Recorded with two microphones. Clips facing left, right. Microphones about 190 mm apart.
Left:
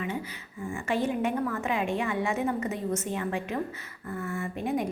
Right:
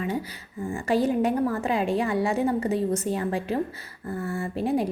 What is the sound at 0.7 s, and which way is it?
A woman's voice, 35° right (ahead or behind).